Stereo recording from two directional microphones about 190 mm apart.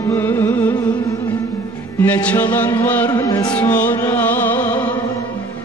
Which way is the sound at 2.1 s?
10° left (ahead or behind).